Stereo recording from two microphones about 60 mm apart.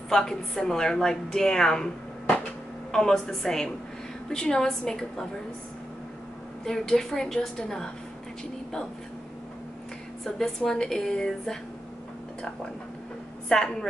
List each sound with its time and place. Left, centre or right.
0.1 s a woman's voice: centre
6.6 s a woman's voice: centre
10.2 s a woman's voice: centre
13.5 s a woman's voice: centre